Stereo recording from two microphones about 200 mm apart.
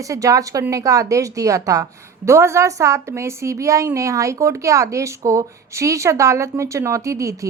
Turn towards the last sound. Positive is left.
turn(degrees=-15)  # may be behind; listen again after turning